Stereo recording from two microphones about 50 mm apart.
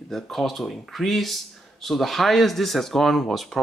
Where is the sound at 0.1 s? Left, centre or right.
Centre.